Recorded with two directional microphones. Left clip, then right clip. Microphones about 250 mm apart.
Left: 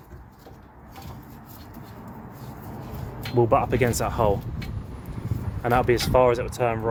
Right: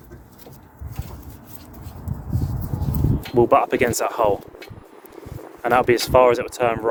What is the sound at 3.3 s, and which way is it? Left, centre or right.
Speech, right.